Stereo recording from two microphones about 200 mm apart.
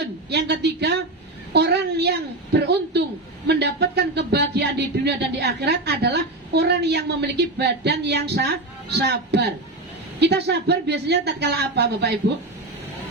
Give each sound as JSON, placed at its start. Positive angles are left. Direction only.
{"t": 0.0, "sound": "a woman's voice", "side_deg": -55}